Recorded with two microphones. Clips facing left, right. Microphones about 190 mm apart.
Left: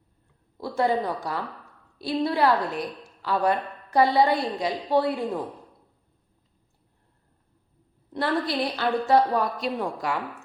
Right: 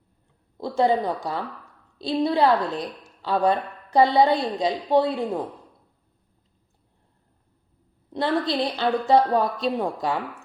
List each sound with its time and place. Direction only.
0.5 s a woman's voice: 20° right (ahead or behind)
8.1 s a woman's voice: 20° right (ahead or behind)